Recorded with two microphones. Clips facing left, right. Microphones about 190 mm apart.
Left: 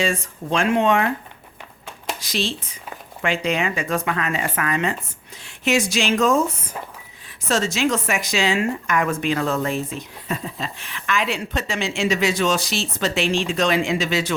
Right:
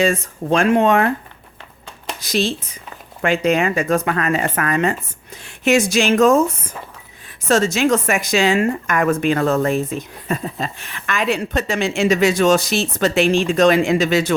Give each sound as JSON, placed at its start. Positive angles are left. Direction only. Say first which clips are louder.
{"t": 0.0, "sound": "a woman's voice", "louder": "right 5 dB", "side_deg": -45}
{"t": 2.2, "sound": "a woman's voice", "louder": "right 7 dB", "side_deg": -45}
{"t": 7.4, "sound": "a woman's voice", "louder": "right 5 dB", "side_deg": -50}